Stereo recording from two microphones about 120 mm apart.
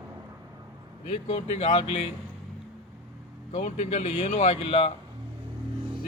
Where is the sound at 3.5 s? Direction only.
75° left (ahead or behind); by 4.9 s 55° left (ahead or behind).